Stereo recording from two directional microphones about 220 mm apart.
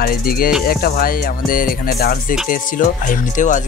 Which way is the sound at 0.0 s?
40° left (ahead or behind).